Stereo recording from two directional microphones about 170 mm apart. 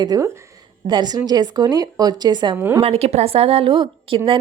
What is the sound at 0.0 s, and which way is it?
A woman's voice, 25° right (ahead or behind).